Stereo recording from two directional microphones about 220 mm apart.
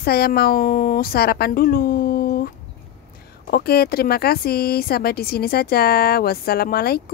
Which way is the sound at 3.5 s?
45° left (ahead or behind).